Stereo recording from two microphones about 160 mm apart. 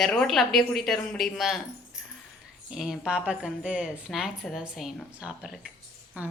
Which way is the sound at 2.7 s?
5° right (ahead or behind).